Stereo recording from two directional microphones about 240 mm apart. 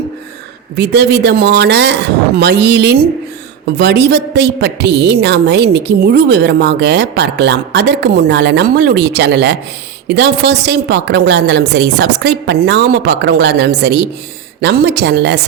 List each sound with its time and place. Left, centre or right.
0.8 s a woman's voice: right